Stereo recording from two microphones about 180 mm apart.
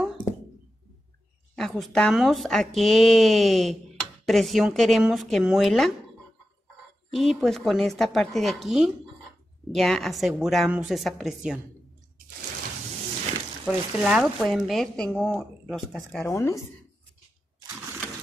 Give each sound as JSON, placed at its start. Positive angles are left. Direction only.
{"t": 1.5, "sound": "speech", "side_deg": 0}
{"t": 7.1, "sound": "speech", "side_deg": 0}
{"t": 13.7, "sound": "speech", "side_deg": -5}
{"t": 16.3, "sound": "speech", "side_deg": 15}